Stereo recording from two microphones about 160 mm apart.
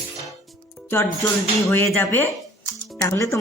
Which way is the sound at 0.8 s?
15° left (ahead or behind).